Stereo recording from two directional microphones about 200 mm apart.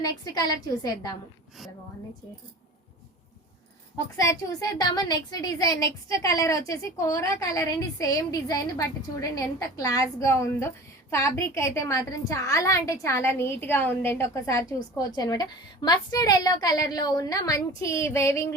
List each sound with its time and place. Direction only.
0.0 s a woman's voice: 20° left (ahead or behind)
4.2 s a woman's voice: 15° left (ahead or behind)